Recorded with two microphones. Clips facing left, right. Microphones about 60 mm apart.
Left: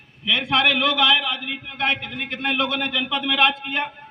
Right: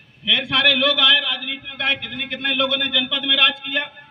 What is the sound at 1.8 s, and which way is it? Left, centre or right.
Speech, left.